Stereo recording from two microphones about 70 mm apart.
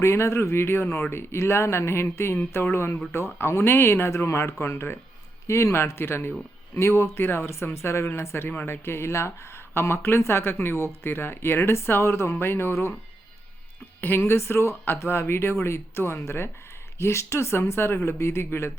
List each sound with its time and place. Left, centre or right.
0.0 s speech: left
14.0 s speech: left